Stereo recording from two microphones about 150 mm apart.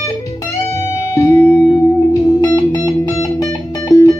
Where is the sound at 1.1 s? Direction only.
20° left (ahead or behind).